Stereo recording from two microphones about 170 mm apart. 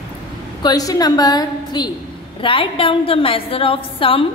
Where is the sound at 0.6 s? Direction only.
20° left (ahead or behind).